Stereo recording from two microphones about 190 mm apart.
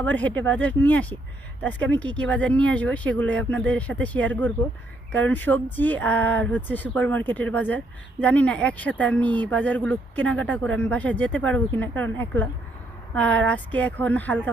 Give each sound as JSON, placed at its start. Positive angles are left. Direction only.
{"t": 0.0, "sound": "speech", "side_deg": 10}